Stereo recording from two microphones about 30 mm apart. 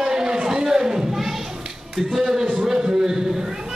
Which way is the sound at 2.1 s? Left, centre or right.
Centre.